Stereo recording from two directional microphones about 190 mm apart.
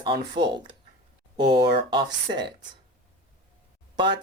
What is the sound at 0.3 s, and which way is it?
Speech, 25° right (ahead or behind).